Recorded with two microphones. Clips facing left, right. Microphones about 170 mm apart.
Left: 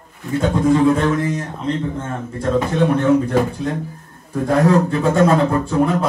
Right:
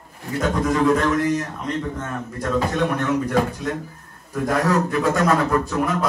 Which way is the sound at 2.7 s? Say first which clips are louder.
Left 6 dB; 30° left (ahead or behind).